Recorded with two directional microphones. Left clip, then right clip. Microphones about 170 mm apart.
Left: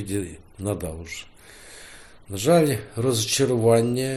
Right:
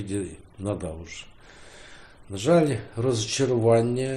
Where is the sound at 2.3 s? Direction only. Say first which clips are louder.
Left 2 dB; 30° left (ahead or behind).